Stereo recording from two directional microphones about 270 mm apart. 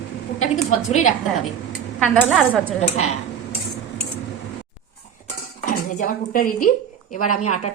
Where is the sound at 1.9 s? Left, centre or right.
Centre.